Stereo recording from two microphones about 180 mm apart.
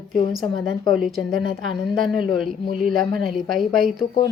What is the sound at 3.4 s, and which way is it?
Speech, centre (ahead or behind).